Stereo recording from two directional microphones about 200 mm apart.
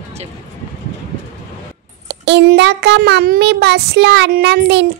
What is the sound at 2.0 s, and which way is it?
A child's voice, 60° right (ahead or behind).